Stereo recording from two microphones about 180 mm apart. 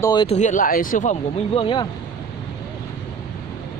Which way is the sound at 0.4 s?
45° left (ahead or behind).